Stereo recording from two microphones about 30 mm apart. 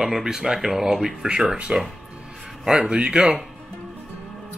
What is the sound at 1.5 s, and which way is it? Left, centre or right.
Speech, right.